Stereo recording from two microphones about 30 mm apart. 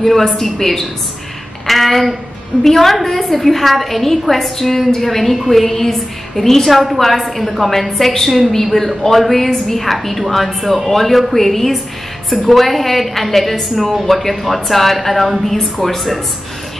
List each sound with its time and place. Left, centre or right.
0.0 s a woman's voice: centre
6.7 s a woman's voice: centre